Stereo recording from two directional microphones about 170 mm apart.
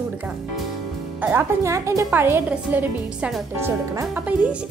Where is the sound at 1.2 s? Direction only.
10° right (ahead or behind).